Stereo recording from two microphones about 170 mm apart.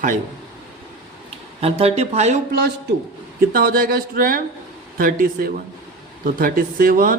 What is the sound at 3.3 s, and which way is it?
Speech, 60° right (ahead or behind).